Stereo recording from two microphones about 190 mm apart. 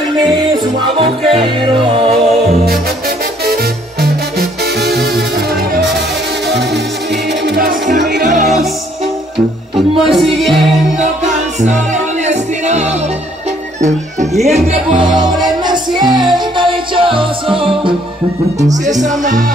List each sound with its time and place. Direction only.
1.3 s music: 30° right (ahead or behind)
4.0 s music: 55° right (ahead or behind)
7.4 s music: 50° right (ahead or behind)
9.8 s music: centre (ahead or behind)
11.0 s music: 40° right (ahead or behind)
14.4 s speech: 35° right (ahead or behind)
14.9 s music: 5° right (ahead or behind)
15.4 s music: 20° right (ahead or behind)
18.9 s speech: 40° right (ahead or behind)